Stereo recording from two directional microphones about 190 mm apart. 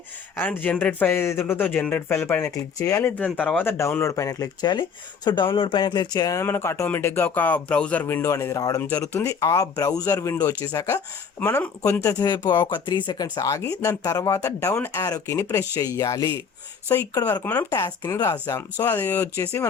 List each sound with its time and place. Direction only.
0.3 s speech: 10° left (ahead or behind)
12.0 s speech: 20° left (ahead or behind)